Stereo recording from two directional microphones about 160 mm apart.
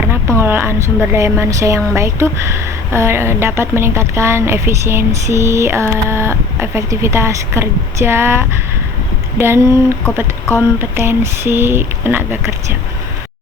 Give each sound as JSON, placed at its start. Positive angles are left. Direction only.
{"t": 0.1, "sound": "a woman's voice", "side_deg": -15}